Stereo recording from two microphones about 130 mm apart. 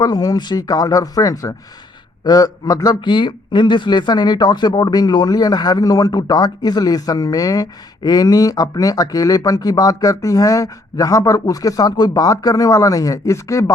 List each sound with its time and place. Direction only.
0.0 s a man's voice: 30° left (ahead or behind)